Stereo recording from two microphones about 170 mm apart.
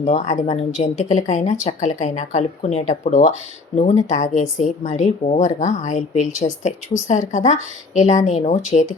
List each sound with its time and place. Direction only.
0.0 s speech: 45° left (ahead or behind)